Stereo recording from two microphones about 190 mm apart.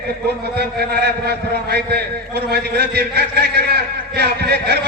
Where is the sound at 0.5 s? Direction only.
60° right (ahead or behind).